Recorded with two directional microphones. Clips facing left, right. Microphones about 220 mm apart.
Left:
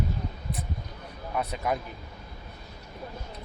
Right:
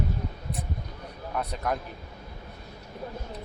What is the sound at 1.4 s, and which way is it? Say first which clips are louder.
Speech: left 1 dB; 5° left (ahead or behind).